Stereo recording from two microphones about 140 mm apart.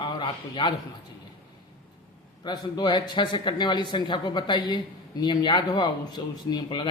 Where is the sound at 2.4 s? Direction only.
30° left (ahead or behind).